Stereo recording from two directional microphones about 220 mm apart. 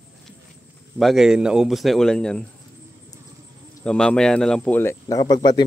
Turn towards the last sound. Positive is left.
turn(degrees=20)  # may be behind; listen again after turning